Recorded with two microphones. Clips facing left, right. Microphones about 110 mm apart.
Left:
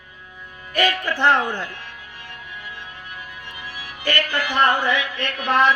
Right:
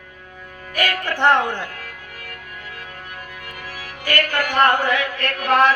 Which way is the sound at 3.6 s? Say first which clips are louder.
Right 1 dB; 45° right (ahead or behind).